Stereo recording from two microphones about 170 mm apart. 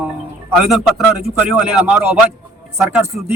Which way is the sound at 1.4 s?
5° right (ahead or behind).